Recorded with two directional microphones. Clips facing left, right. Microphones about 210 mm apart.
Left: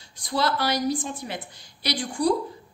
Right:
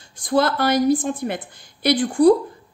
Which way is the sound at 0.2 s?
50° right (ahead or behind).